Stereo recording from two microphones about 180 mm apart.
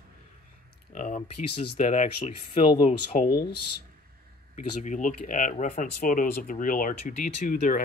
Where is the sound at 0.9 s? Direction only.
45° left (ahead or behind).